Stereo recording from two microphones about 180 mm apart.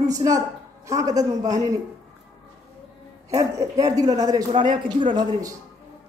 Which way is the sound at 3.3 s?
20° right (ahead or behind).